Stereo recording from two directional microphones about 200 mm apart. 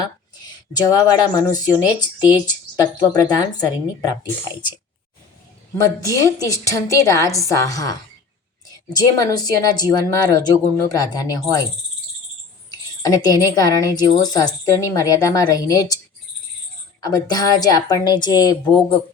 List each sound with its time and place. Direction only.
0.0 s speech: 20° left (ahead or behind)
3.1 s speech: 20° left (ahead or behind)
5.7 s a woman's voice: 15° left (ahead or behind)
12.7 s a woman's voice: 20° left (ahead or behind)
17.0 s speech: 20° left (ahead or behind)